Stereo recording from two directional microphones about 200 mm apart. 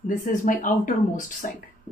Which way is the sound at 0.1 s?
40° left (ahead or behind).